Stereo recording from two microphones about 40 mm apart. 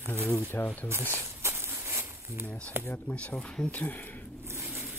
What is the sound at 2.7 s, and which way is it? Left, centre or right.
Speech, right.